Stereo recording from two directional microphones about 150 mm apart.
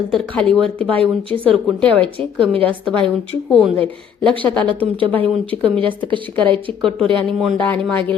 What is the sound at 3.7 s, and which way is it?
A woman's voice, 10° left (ahead or behind).